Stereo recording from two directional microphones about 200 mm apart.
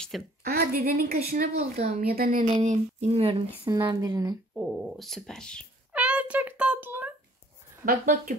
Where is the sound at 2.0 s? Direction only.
45° right (ahead or behind); by 3.4 s 30° right (ahead or behind).